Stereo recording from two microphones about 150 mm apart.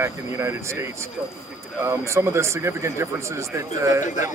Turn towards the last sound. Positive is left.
turn(degrees=-20)  # may be behind; listen again after turning